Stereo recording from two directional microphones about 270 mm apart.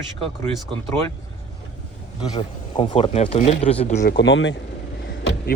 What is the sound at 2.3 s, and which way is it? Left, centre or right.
Speech, centre.